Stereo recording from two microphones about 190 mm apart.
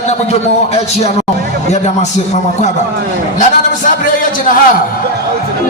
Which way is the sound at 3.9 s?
45° left (ahead or behind).